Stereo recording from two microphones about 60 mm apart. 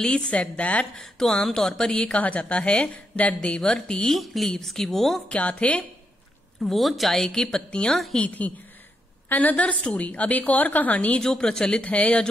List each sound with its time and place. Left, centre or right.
0.0 s a woman's voice: centre
0.9 s a woman's voice: centre
5.3 s a woman's voice: centre
6.6 s a woman's voice: centre
8.4 s a woman's voice: left
11.1 s a woman's voice: centre